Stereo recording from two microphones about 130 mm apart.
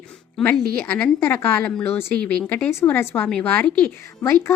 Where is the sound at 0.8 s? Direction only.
15° left (ahead or behind).